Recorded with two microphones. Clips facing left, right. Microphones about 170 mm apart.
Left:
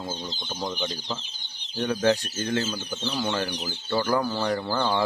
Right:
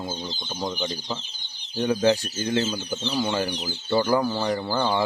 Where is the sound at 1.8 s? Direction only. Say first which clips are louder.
Right 2 dB; 10° right (ahead or behind).